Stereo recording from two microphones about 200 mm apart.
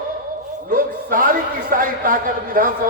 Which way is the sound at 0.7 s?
45° right (ahead or behind).